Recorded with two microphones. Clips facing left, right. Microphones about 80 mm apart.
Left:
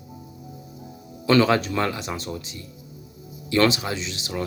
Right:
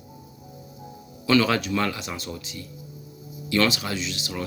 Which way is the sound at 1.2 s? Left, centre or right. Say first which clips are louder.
Left 3 dB; left.